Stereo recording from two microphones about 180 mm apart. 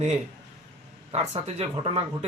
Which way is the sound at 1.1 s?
35° right (ahead or behind).